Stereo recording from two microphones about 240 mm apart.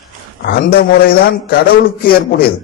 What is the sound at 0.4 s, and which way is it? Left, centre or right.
A man's voice, left.